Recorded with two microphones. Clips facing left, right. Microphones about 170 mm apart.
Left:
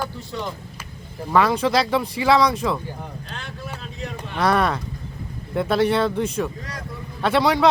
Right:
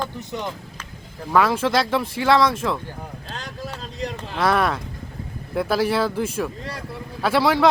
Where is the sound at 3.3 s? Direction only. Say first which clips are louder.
Right 3 dB; 40° right (ahead or behind).